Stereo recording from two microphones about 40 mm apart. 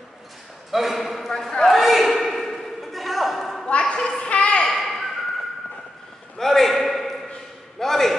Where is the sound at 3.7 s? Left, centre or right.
Left.